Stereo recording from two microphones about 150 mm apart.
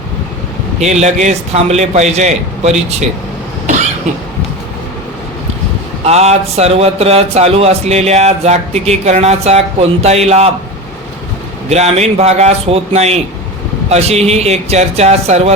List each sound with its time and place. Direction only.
0.8 s speech: 45° right (ahead or behind)
6.1 s speech: 45° right (ahead or behind)
11.7 s speech: 45° right (ahead or behind)